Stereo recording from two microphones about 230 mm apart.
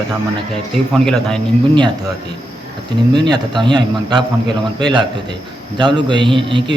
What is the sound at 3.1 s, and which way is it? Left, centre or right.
A man's voice, centre.